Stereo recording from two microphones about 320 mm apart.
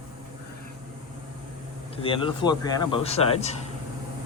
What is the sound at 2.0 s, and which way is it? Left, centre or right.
A man's voice, centre.